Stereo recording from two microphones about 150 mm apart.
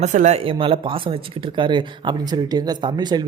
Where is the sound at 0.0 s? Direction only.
50° right (ahead or behind).